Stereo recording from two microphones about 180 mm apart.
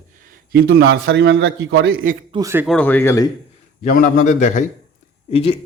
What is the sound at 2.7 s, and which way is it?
Speech, 10° left (ahead or behind).